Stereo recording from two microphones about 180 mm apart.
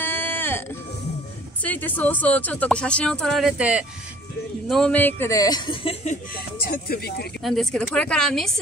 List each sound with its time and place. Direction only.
0.0 s a sound: 10° left (ahead or behind)
1.6 s speech: 10° left (ahead or behind); by 3.8 s 5° right (ahead or behind)
4.6 s speech: 5° left (ahead or behind); by 6.1 s 30° left (ahead or behind)
6.3 s speech: 60° left (ahead or behind)
7.4 s speech: centre (ahead or behind)